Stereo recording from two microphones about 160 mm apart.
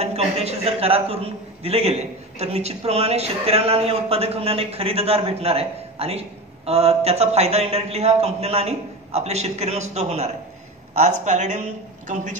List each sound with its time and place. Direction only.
0.0 s a man's voice: 40° right (ahead or behind)